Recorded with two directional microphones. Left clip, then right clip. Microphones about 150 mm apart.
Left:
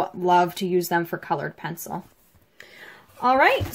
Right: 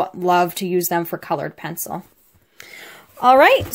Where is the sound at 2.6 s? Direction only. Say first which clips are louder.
Right 5 dB; 60° right (ahead or behind).